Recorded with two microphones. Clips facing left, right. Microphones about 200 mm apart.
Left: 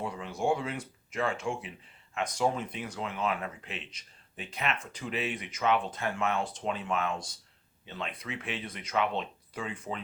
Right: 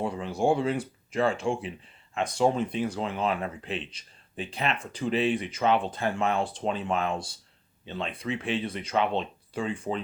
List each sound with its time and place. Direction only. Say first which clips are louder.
0.0 s speech: right 5 dB; 30° right (ahead or behind)